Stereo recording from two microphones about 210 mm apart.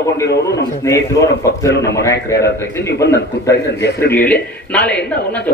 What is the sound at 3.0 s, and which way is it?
Speech, 55° left (ahead or behind).